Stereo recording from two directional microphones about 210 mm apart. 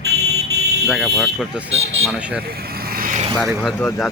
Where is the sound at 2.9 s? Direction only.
40° right (ahead or behind).